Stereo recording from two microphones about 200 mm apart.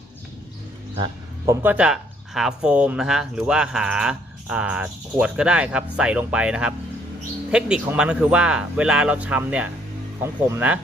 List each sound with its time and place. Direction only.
0.9 s music: 20° right (ahead or behind)
1.6 s speech: 5° right (ahead or behind)